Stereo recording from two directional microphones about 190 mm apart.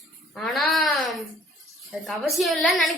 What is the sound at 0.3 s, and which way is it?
A child's voice, centre (ahead or behind).